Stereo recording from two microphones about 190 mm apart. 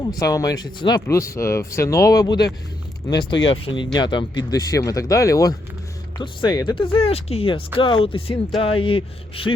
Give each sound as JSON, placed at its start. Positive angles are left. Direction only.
{"t": 0.0, "sound": "speech", "side_deg": 20}